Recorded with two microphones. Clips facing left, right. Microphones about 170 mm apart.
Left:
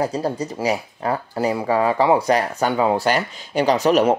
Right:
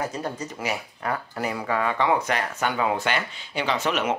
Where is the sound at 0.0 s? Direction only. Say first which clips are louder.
Left 7 dB; 35° left (ahead or behind).